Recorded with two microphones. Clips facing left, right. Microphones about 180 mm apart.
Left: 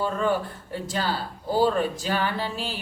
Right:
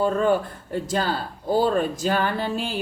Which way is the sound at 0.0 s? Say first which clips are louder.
Right 4 dB; 45° right (ahead or behind).